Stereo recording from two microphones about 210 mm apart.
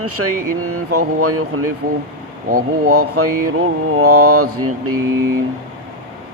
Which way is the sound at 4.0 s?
90° right.